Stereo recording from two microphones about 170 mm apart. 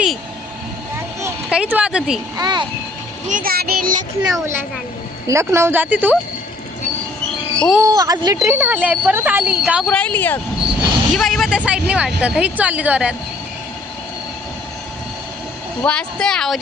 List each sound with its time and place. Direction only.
1.5 s speech: 5° right (ahead or behind)
2.4 s a sound: 25° right (ahead or behind)
3.2 s a child's voice: 55° right (ahead or behind)
5.3 s speech: 15° right (ahead or behind)
7.8 s a woman's voice: 20° right (ahead or behind)
8.4 s speech: 10° right (ahead or behind)
9.8 s speech: 5° left (ahead or behind)
10.6 s speech: centre (ahead or behind)
15.8 s speech: 5° left (ahead or behind)